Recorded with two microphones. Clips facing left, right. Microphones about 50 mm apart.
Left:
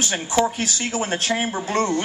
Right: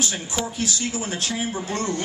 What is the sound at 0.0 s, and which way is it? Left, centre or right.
Speech, left.